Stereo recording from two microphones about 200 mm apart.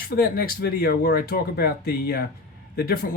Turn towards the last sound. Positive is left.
turn(degrees=50)  # may be behind; listen again after turning